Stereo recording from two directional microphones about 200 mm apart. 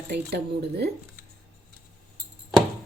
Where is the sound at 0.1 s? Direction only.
55° right (ahead or behind).